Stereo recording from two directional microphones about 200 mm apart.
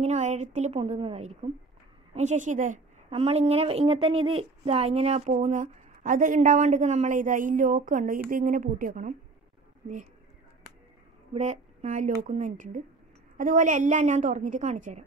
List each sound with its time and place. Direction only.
0.0 s a woman's voice: 35° right (ahead or behind)
11.3 s a woman's voice: 35° right (ahead or behind)